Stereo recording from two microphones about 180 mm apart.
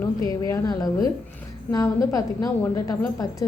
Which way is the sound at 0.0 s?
20° left (ahead or behind).